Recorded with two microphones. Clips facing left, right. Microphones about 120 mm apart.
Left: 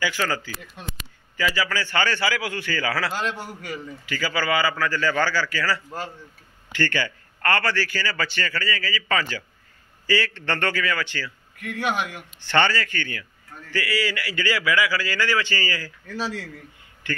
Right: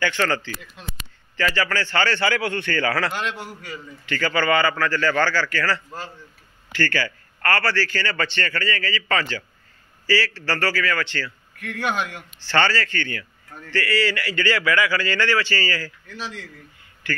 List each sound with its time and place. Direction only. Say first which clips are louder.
0.0 s a man's voice: right 3 dB; 10° left (ahead or behind)